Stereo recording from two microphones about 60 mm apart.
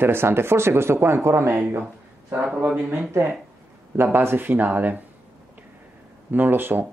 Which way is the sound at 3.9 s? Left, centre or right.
Right.